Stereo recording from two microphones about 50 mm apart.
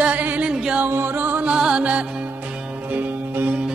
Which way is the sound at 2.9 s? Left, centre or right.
Right.